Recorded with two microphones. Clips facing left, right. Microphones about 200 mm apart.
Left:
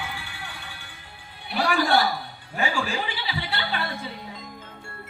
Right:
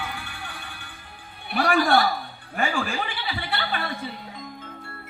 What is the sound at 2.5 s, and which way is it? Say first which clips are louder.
Chuckle: right 1 dB; 55° right (ahead or behind).